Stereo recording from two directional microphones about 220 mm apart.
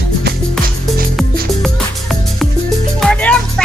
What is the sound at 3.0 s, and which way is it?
Music, 5° left (ahead or behind).